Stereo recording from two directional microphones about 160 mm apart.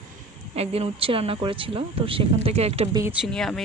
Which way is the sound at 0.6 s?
35° right (ahead or behind).